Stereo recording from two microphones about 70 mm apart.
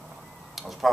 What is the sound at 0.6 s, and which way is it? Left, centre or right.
Speech, centre.